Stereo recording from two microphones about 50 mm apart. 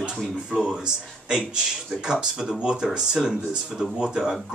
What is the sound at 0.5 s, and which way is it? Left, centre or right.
Speech, centre.